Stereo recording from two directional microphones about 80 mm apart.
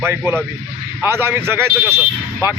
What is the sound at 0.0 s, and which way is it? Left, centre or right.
Speech, right.